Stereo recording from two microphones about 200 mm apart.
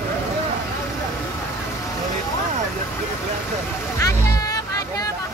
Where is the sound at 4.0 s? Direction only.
15° left (ahead or behind).